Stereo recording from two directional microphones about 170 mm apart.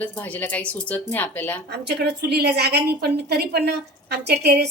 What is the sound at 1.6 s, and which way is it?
A woman's voice, 80° right.